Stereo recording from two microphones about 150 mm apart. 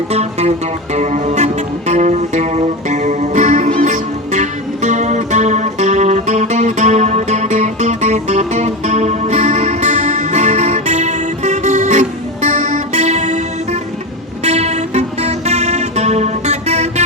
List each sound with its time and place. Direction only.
0.1 s music: 45° right (ahead or behind)
14.4 s music: 45° right (ahead or behind)